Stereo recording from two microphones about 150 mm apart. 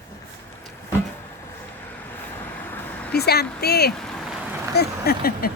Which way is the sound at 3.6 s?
90° left.